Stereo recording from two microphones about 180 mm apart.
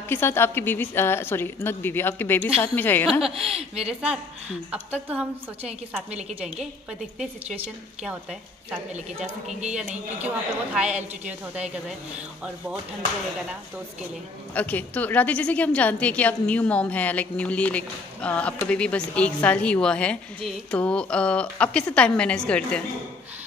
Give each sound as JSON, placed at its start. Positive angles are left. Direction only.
{"t": 0.1, "sound": "a woman's voice", "side_deg": 15}
{"t": 3.3, "sound": "speech", "side_deg": -35}
{"t": 3.8, "sound": "a woman's voice", "side_deg": -5}
{"t": 8.0, "sound": "a woman's voice", "side_deg": -5}
{"t": 9.8, "sound": "a woman's voice", "side_deg": -5}
{"t": 14.5, "sound": "a woman's voice", "side_deg": 10}